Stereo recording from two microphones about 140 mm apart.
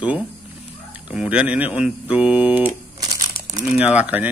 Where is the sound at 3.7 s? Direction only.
10° right (ahead or behind).